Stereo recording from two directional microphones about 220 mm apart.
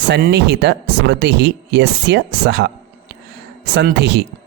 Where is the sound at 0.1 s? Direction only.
50° right (ahead or behind).